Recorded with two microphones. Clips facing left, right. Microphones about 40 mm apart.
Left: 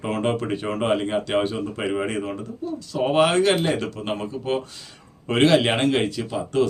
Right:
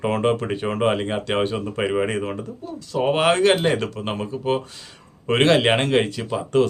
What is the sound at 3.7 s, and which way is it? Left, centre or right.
Speech, right.